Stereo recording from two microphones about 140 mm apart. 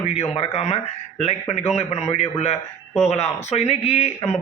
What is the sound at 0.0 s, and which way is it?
Speech, 45° left (ahead or behind).